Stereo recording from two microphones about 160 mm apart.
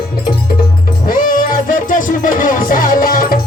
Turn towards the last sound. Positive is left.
turn(degrees=65)  # may be behind; listen again after turning